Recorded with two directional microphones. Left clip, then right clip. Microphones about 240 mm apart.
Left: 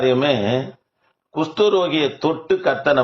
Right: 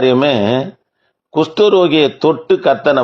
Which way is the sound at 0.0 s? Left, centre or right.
Right.